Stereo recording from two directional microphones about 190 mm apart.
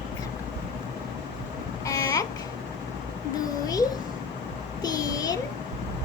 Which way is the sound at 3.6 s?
20° left (ahead or behind).